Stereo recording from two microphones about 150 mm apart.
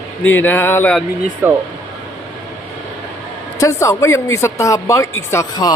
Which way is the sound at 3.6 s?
20° left (ahead or behind).